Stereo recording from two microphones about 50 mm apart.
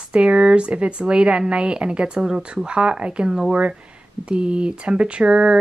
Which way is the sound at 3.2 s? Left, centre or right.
Centre.